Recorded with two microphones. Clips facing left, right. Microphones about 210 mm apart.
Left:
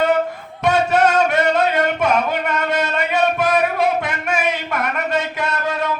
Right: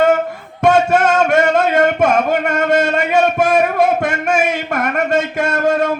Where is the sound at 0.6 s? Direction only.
50° right (ahead or behind).